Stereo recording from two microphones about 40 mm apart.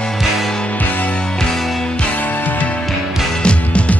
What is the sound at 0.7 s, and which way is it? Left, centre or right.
Music, left.